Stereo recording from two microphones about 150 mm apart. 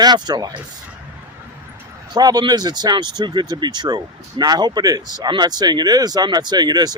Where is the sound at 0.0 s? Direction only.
30° right (ahead or behind).